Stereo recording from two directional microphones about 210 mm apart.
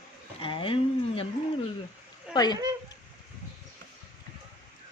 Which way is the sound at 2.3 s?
20° left (ahead or behind).